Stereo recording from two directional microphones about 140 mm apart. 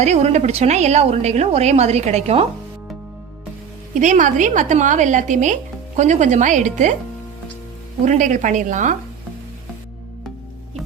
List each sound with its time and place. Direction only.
0.0 s a woman's voice: 50° right (ahead or behind)
4.0 s a woman's voice: 65° right (ahead or behind)
8.0 s a woman's voice: 60° right (ahead or behind)